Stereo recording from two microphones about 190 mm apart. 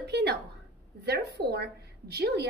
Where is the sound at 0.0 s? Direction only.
60° right (ahead or behind).